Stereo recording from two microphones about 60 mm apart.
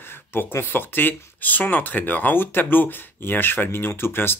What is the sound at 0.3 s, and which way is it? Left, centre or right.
Speech, left.